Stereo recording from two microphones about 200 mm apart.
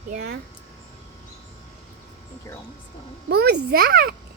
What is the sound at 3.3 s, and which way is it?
Speech, 55° right (ahead or behind).